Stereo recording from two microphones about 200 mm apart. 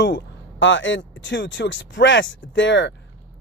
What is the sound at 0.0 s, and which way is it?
Speech, 60° left (ahead or behind).